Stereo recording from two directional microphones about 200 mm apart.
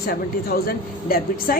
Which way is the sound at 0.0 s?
50° left (ahead or behind).